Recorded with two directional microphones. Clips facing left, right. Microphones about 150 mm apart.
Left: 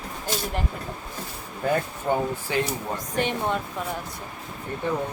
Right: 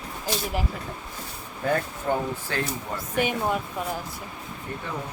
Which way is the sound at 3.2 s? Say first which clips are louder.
Right 1 dB; 5° right (ahead or behind).